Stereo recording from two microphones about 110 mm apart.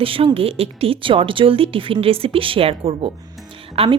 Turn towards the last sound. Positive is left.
turn(degrees=-60)  # may be behind; listen again after turning